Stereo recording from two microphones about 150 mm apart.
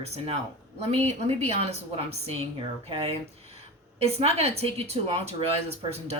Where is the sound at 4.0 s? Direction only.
40° right (ahead or behind).